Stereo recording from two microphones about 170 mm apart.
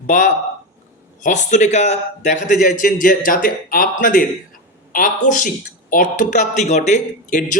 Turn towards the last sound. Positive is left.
turn(degrees=45)  # may be behind; listen again after turning